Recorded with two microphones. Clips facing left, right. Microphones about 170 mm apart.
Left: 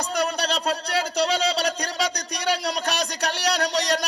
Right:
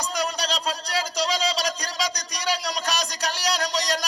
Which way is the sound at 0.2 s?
60° left (ahead or behind).